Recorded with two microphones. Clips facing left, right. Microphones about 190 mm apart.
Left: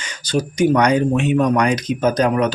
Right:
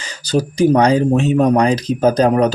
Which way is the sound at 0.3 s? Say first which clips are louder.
Right 3 dB; 35° right (ahead or behind).